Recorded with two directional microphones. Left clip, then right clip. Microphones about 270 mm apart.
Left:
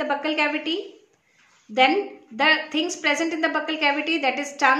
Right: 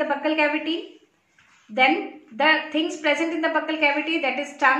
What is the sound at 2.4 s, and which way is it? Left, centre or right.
A woman's voice, left.